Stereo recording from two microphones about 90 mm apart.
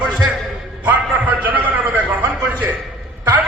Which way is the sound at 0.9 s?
20° right (ahead or behind).